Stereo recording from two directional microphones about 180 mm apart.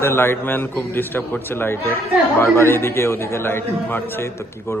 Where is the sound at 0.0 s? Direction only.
15° left (ahead or behind).